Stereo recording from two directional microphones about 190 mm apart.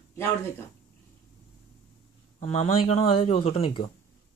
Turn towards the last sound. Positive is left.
turn(degrees=30)  # may be behind; listen again after turning